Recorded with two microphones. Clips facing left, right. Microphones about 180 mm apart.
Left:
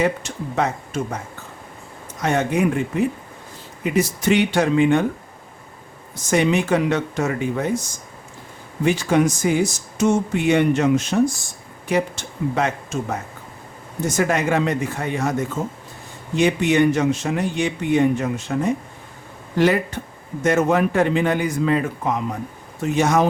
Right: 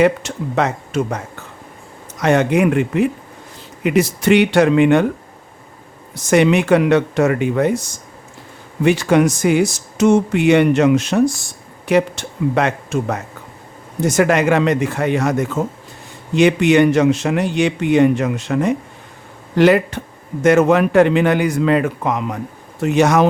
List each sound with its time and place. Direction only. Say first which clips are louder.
0.0 s speech: right 6 dB; 70° right (ahead or behind)
2.2 s speech: right 5 dB; 75° right (ahead or behind)
6.1 s speech: right 5 dB; 70° right (ahead or behind)
8.8 s speech: right 4 dB; 65° right (ahead or behind)